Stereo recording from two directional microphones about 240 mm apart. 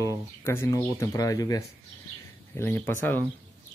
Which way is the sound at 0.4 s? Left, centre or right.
Centre.